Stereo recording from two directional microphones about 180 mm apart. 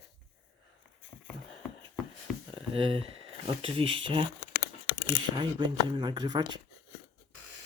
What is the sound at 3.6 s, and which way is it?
Speech, 30° right (ahead or behind).